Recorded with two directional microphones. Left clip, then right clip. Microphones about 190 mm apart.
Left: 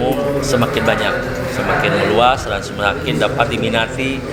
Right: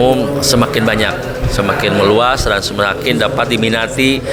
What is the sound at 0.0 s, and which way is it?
A man's voice, 65° right (ahead or behind).